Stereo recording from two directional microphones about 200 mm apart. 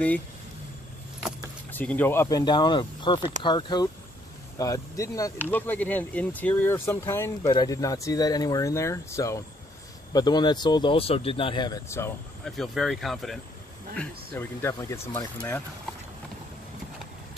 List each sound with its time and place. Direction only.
1.7 s speech: 10° left (ahead or behind)
12.4 s speech: centre (ahead or behind)